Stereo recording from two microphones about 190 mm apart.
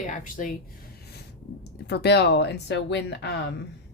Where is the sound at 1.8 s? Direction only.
60° left (ahead or behind).